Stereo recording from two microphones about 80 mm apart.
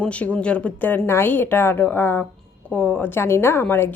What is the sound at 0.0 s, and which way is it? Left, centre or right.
A woman's voice, centre.